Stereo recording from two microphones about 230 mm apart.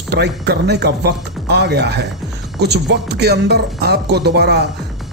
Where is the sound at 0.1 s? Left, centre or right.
Right.